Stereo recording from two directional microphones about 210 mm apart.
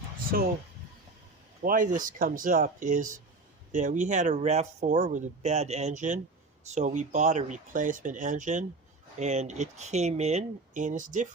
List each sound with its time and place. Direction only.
1.6 s speech: 40° right (ahead or behind)